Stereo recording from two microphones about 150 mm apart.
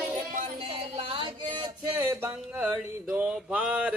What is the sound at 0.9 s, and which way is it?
Music, 40° right (ahead or behind).